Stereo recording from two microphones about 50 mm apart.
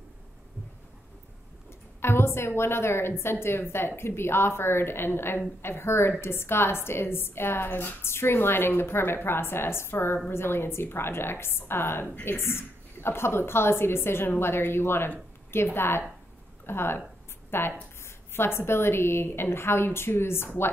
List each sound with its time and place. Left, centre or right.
2.0 s a woman's voice: left